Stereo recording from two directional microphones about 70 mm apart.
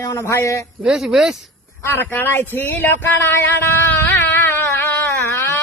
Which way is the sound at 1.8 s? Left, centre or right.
Left.